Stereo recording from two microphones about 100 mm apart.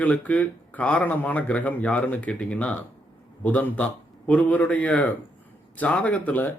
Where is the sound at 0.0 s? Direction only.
15° left (ahead or behind).